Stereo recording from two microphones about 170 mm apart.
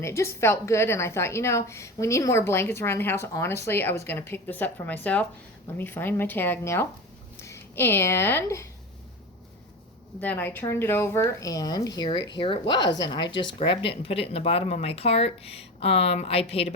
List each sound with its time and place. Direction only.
0.0 s a woman's voice: 15° left (ahead or behind)
10.2 s speech: 10° left (ahead or behind); by 16.7 s 35° left (ahead or behind)